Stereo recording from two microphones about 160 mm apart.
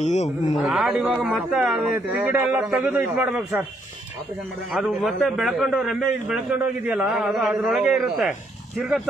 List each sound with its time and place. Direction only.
0.0 s speech: 45° left (ahead or behind)
0.6 s a man's voice: centre (ahead or behind)
4.7 s a man's voice: centre (ahead or behind)